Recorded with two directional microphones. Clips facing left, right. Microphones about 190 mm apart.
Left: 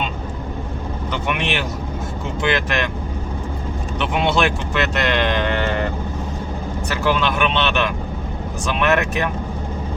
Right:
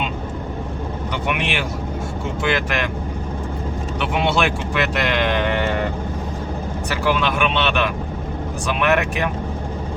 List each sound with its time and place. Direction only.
1.3 s speech: 10° right (ahead or behind)
4.0 s speech: 5° right (ahead or behind)
7.0 s speech: 10° right (ahead or behind)